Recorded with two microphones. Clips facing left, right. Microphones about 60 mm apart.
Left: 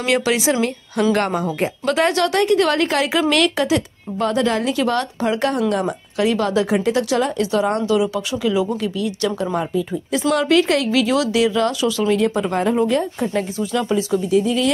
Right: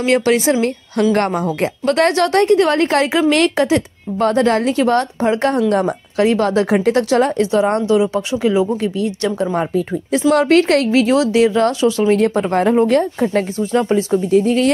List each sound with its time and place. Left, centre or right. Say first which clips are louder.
0.0 s speech: right 4 dB; right
10.9 s speech: right 4 dB; right